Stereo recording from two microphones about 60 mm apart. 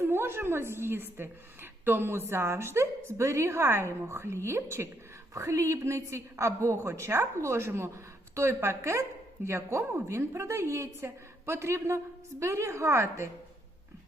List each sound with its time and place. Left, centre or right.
0.0 s a woman's voice: right
5.3 s a woman's voice: right